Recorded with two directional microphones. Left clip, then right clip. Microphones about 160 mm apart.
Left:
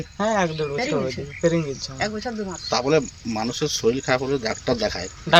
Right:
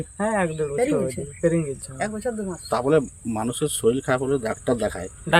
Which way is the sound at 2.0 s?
90° right.